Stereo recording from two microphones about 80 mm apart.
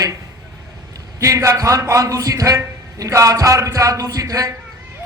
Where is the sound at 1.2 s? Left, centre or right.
Right.